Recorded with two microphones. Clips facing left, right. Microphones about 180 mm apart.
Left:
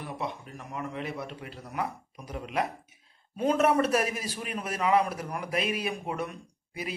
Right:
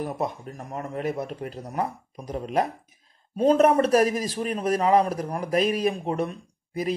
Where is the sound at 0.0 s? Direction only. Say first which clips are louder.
Right 7 dB; 45° right (ahead or behind).